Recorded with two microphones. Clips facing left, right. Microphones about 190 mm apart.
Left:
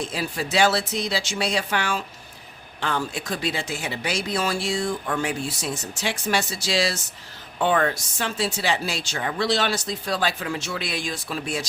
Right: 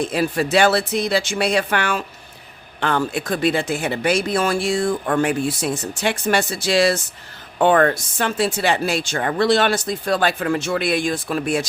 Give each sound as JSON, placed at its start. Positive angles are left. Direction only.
{"t": 0.0, "sound": "speech", "side_deg": -60}